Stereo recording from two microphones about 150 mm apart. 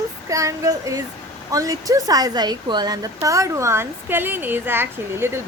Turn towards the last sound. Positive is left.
turn(degrees=-15)  # may be behind; listen again after turning